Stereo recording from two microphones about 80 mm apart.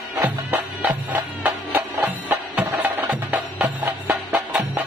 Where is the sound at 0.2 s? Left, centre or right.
Right.